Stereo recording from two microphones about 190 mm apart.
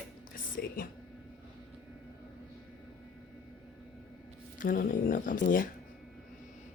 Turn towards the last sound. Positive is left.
turn(degrees=45)  # may be behind; listen again after turning